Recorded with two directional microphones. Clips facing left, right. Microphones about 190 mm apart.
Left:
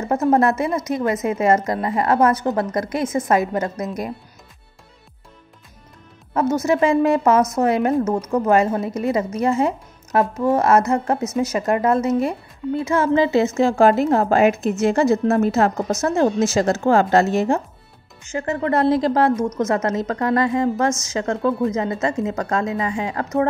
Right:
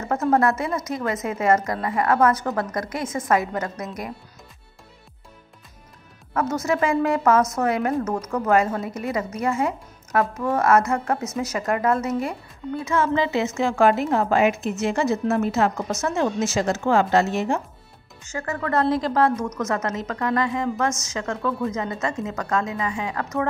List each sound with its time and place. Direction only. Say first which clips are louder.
0.1 s a woman's voice: left 3 dB; 25° left (ahead or behind)
6.3 s a woman's voice: left 5 dB; 25° left (ahead or behind)
18.2 s a woman's voice: left 5 dB; 25° left (ahead or behind)